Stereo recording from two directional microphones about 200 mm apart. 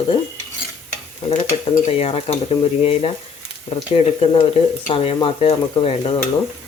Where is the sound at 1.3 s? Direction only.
30° left (ahead or behind).